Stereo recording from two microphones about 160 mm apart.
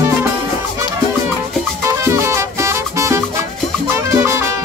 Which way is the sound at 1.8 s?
15° right (ahead or behind).